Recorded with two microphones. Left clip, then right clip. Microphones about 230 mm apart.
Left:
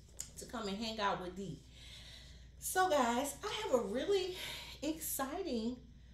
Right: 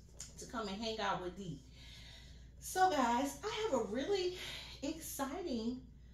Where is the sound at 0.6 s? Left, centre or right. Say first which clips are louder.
Left 3 dB; left.